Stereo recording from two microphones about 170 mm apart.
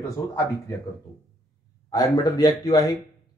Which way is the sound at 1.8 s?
20° left (ahead or behind).